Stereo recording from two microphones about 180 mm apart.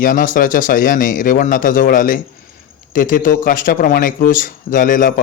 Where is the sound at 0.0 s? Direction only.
50° left (ahead or behind).